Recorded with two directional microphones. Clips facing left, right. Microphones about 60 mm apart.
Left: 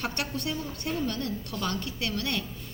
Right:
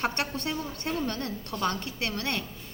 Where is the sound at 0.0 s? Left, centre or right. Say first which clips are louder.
Right 2 dB; right.